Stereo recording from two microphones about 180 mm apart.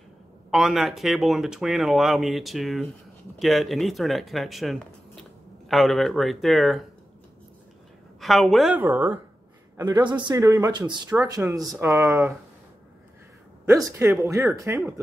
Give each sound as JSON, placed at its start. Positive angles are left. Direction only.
{"t": 0.5, "sound": "speech", "side_deg": 0}
{"t": 8.2, "sound": "speech", "side_deg": 0}
{"t": 9.8, "sound": "speech", "side_deg": -25}
{"t": 13.8, "sound": "speech", "side_deg": -15}